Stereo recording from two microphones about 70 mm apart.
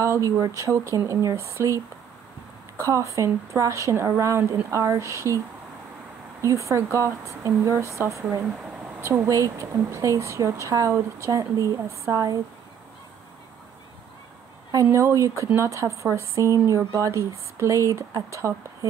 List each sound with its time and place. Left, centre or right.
0.0 s speech: right
2.9 s speech: right
6.4 s speech: right
8.6 s a sound: centre
9.2 s speech: right
14.9 s speech: right